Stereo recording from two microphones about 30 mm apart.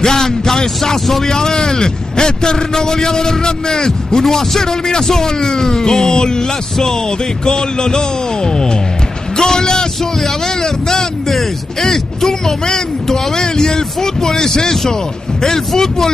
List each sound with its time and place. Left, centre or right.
0.0 s a man's voice: centre